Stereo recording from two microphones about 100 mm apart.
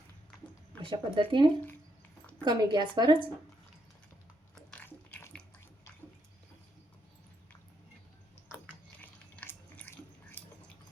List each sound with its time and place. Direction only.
0.9 s a woman's voice: 55° right (ahead or behind)
4.8 s a sound: 20° left (ahead or behind)
9.0 s water: 20° left (ahead or behind)